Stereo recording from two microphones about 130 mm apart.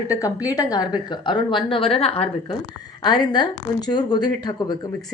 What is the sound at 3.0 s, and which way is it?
A woman's voice, 35° left (ahead or behind).